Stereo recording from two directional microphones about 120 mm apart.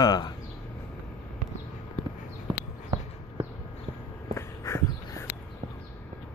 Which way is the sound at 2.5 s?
40° right (ahead or behind).